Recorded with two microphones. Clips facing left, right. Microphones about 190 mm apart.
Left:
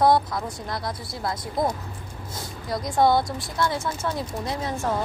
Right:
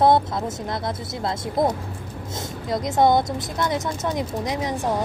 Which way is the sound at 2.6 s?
20° right (ahead or behind).